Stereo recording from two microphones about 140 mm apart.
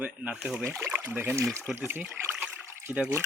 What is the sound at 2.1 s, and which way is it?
Trickle, 15° right (ahead or behind).